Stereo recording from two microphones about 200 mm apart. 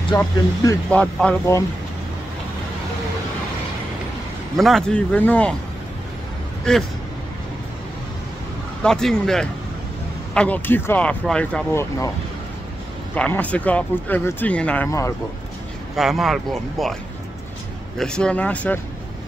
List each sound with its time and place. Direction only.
0.1 s speech: 15° left (ahead or behind)
0.8 s speech: 5° left (ahead or behind)
4.6 s speech: centre (ahead or behind)
6.7 s speech: 5° left (ahead or behind)
8.8 s speech: 5° left (ahead or behind)
13.1 s speech: 10° left (ahead or behind)
16.0 s speech: centre (ahead or behind)
17.9 s speech: 5° left (ahead or behind)